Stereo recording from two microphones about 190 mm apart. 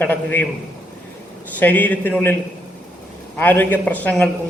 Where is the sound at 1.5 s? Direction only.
10° left (ahead or behind).